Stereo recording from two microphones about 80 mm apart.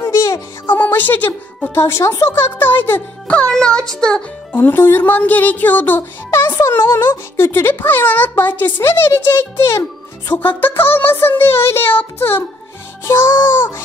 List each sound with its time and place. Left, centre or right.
0.0 s music: left
0.7 s a woman's voice: left
2.2 s music: left
3.3 s a child's voice: centre
4.5 s music: left
8.8 s a child's voice: left
10.3 s music: left